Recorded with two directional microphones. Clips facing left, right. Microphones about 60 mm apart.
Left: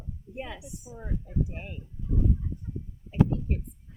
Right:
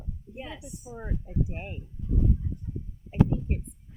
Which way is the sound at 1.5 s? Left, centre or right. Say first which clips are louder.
Right 2 dB; centre.